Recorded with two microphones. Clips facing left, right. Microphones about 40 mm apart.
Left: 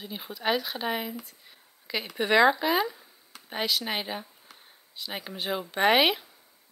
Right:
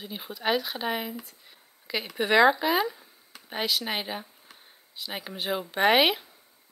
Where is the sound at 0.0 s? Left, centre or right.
Centre.